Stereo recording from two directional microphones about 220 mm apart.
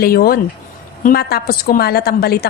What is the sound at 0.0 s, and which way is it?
A woman's voice, 45° left (ahead or behind).